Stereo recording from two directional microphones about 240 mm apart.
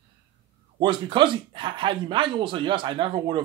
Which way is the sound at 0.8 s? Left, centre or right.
Centre.